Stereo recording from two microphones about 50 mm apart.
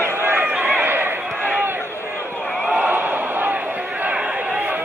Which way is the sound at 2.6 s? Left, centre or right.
Right.